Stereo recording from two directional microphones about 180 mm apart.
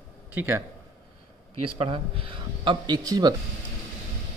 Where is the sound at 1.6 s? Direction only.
30° right (ahead or behind).